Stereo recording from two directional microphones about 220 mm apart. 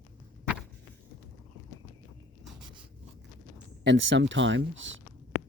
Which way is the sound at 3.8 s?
55° right (ahead or behind).